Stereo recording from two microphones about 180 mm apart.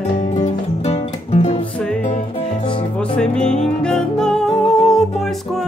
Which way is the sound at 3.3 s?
40° left (ahead or behind).